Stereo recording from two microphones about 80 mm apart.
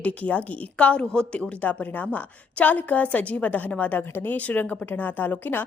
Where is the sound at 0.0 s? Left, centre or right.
Centre.